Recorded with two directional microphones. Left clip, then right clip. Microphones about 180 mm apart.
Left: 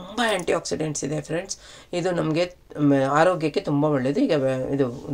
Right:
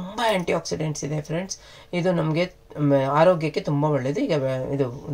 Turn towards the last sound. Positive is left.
turn(degrees=30)  # may be behind; listen again after turning